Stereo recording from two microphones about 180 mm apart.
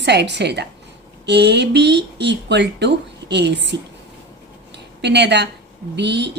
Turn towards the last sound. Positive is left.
turn(degrees=-70)  # may be behind; listen again after turning